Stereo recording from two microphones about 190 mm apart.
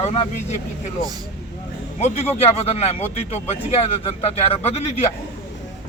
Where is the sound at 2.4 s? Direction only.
35° left (ahead or behind).